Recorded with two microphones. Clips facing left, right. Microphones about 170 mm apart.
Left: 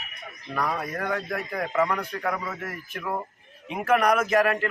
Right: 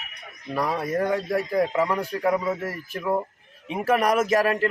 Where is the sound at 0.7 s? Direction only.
20° right (ahead or behind).